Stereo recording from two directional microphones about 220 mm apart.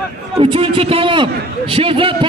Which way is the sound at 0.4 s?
25° right (ahead or behind).